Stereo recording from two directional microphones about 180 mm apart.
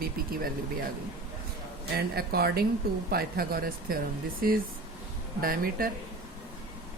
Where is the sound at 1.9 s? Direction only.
60° right (ahead or behind).